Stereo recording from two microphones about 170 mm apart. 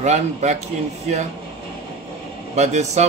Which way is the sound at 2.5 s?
40° right (ahead or behind).